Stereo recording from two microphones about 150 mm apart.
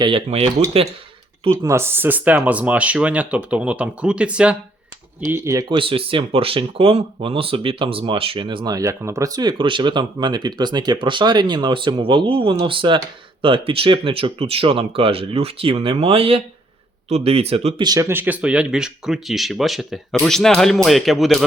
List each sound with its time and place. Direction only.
0.0 s speech: 35° right (ahead or behind)
1.6 s speech: 15° right (ahead or behind)
5.2 s speech: 20° right (ahead or behind)
5.6 s speech: 35° right (ahead or behind)
17.8 s speech: 20° right (ahead or behind); by 21.4 s centre (ahead or behind)